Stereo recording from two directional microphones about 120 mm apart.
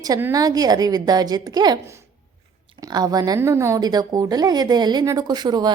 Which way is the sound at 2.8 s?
30° right (ahead or behind).